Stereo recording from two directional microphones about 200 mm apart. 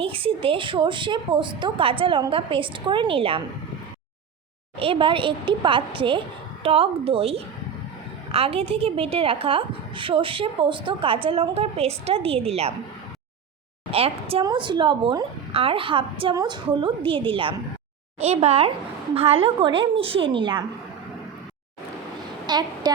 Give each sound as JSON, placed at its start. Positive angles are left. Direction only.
{"t": 0.0, "sound": "a woman's voice", "side_deg": -25}
{"t": 4.8, "sound": "a woman's voice", "side_deg": -25}
{"t": 13.9, "sound": "a woman's voice", "side_deg": -30}
{"t": 22.4, "sound": "a woman's voice", "side_deg": -20}